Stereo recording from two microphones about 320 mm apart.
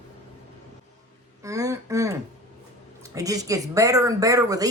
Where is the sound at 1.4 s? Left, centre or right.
Centre.